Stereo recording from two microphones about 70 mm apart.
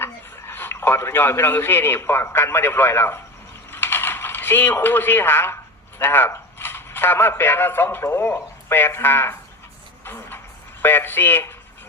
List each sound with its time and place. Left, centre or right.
0.0 s speech: left
3.7 s mechanisms: left
6.0 s speech: left
10.0 s vehicle: left
10.8 s speech: left